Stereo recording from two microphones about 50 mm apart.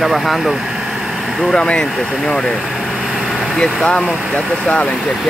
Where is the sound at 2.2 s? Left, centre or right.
Centre.